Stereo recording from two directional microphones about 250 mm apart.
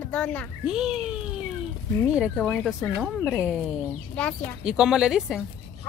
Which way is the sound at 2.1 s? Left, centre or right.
Centre.